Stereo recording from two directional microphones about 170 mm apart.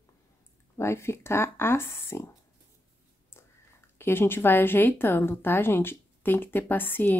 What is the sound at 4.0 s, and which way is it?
Speech, 15° left (ahead or behind).